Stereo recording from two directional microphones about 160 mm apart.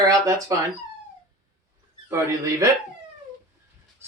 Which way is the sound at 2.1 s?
20° right (ahead or behind).